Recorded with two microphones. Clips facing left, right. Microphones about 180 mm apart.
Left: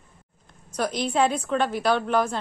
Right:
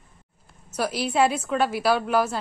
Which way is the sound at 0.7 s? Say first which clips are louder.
Even; 5° right (ahead or behind).